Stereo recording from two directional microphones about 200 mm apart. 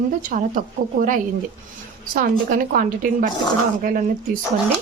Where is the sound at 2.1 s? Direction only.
45° right (ahead or behind).